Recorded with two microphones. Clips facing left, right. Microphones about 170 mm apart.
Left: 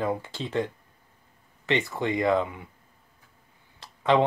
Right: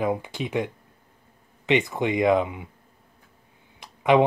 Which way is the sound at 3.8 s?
15° right (ahead or behind).